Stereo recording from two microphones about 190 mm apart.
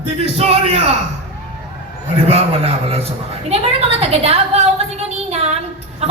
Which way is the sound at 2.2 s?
30° right (ahead or behind).